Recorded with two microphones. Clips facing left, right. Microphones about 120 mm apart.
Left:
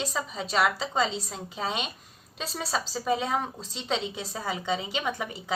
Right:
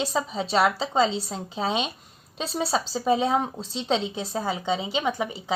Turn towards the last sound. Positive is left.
turn(degrees=-20)  # may be behind; listen again after turning